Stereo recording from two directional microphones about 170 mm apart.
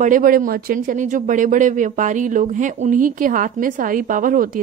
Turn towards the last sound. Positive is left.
turn(degrees=-55)  # may be behind; listen again after turning